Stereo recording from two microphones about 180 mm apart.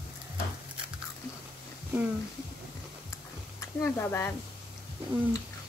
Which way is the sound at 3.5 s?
15° left (ahead or behind).